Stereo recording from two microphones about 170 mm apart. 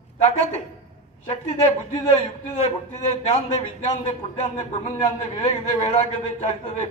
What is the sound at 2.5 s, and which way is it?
A man's voice, 40° left (ahead or behind).